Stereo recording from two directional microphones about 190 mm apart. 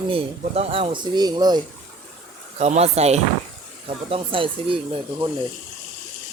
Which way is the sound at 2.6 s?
35° right (ahead or behind).